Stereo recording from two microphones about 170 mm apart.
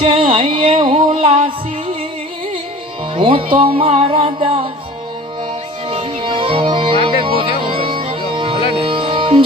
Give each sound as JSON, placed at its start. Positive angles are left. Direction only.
{"t": 0.0, "sound": "music", "side_deg": -30}
{"t": 3.2, "sound": "music", "side_deg": -30}
{"t": 5.9, "sound": "music", "side_deg": -30}